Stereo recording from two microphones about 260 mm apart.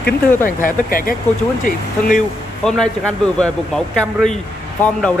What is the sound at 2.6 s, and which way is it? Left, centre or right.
Speech, centre.